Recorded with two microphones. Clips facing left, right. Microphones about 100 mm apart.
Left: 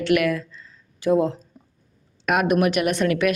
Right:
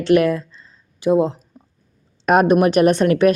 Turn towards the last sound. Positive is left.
turn(degrees=-35)  # may be behind; listen again after turning